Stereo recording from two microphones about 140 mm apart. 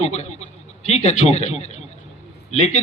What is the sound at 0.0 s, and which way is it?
A man's voice, 55° left (ahead or behind).